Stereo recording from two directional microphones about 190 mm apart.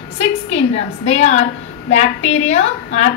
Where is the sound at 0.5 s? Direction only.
35° left (ahead or behind).